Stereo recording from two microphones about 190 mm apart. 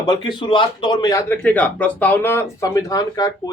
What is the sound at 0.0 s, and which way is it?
Speech, 20° left (ahead or behind).